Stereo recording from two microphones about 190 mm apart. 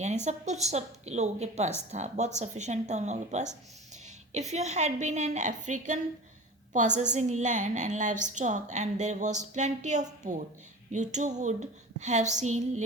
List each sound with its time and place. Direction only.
0.3 s a woman's voice: 35° right (ahead or behind)